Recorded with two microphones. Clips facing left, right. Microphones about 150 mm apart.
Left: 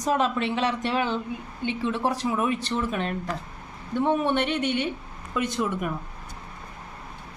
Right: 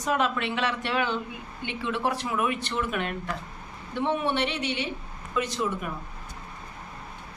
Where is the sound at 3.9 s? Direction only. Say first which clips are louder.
Left 3 dB; 45° left (ahead or behind).